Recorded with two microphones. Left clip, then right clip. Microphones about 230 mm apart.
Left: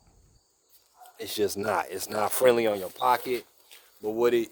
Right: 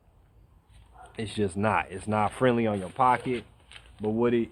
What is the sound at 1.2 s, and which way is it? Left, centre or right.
Speech, left.